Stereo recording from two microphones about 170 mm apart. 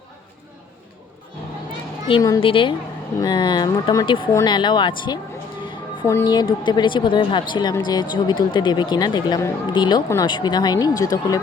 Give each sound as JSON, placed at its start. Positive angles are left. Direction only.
{"t": 2.1, "sound": "a woman's voice", "side_deg": 30}